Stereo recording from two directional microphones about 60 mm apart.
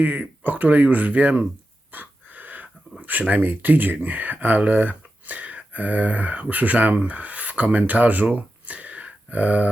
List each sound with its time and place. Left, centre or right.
0.0 s speech: right
1.9 s wheeze: right
3.1 s speech: right